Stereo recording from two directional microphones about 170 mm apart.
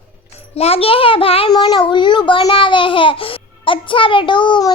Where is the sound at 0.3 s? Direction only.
35° left (ahead or behind).